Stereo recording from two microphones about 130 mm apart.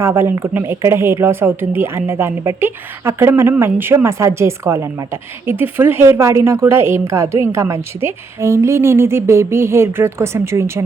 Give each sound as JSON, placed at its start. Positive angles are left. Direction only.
{"t": 0.0, "sound": "a woman's voice", "side_deg": -20}